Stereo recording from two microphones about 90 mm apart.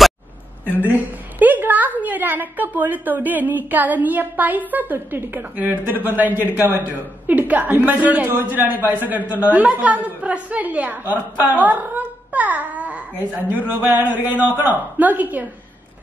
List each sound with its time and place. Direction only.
1.4 s a woman's voice: 20° right (ahead or behind)